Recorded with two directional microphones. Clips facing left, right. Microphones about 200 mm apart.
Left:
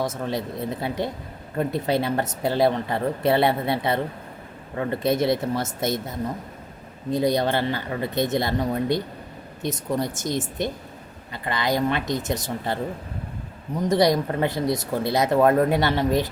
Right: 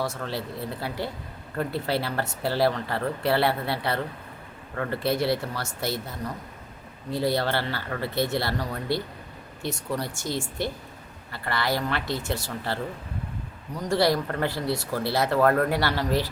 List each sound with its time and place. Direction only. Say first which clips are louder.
0.0 s speech: left 4 dB; 20° left (ahead or behind)